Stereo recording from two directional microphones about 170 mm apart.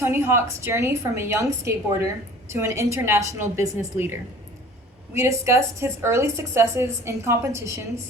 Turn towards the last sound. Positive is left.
turn(degrees=-15)  # may be behind; listen again after turning